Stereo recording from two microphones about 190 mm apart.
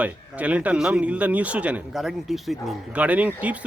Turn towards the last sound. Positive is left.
turn(degrees=-5)  # may be behind; listen again after turning